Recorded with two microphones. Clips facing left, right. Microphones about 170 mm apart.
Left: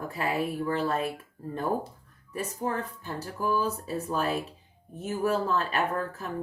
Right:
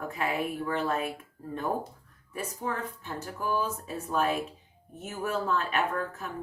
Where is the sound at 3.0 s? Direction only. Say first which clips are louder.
Left 3 dB; 35° left (ahead or behind).